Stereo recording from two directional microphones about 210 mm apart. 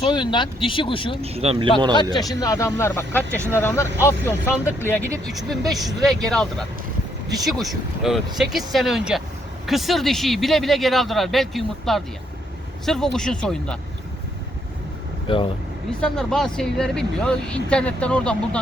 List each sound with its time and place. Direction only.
0.0 s speech: 20° left (ahead or behind)
1.2 s speech: 30° right (ahead or behind)
2.0 s speech: 20° left (ahead or behind)
5.3 s speech: centre (ahead or behind)
15.3 s speech: 25° left (ahead or behind)
15.9 s speech: 5° left (ahead or behind)